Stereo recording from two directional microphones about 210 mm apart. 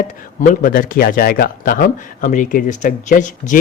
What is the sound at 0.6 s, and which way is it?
Speech, 45° left (ahead or behind).